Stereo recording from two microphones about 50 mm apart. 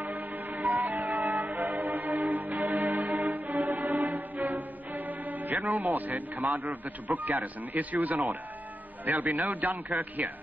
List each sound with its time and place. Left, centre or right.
0.0 s music: right
4.1 s music: right
6.4 s a man's voice: right